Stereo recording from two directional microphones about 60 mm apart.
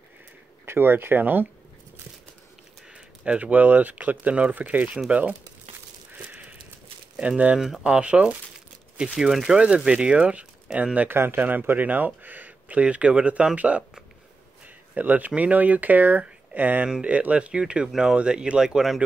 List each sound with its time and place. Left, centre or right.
0.7 s speech: right
2.9 s speech: right
6.3 s a sound: right
7.2 s speech: right
7.5 s speech: centre
7.8 s speech: centre
15.0 s speech: right; by 19.0 s centre